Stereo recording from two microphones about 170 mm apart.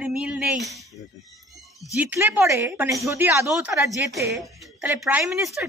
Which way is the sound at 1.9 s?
10° right (ahead or behind).